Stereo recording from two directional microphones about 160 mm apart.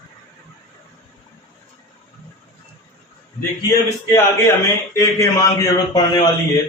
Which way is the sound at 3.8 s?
20° left (ahead or behind).